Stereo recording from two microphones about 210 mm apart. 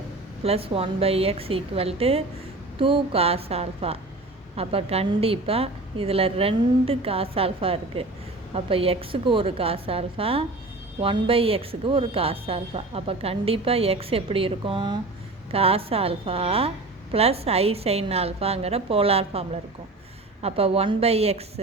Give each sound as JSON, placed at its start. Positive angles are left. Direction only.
{"t": 0.4, "sound": "speech", "side_deg": -25}